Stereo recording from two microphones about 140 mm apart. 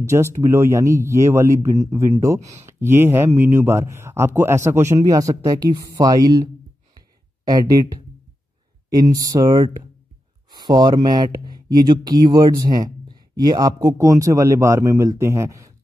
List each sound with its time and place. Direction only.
0.0 s speech: 20° right (ahead or behind)
9.1 s speech: 25° right (ahead or behind)